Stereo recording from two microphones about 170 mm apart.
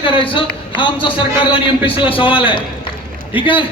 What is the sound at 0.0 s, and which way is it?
A man's voice, 30° left (ahead or behind).